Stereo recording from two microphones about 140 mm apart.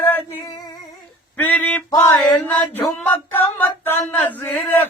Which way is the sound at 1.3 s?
10° left (ahead or behind).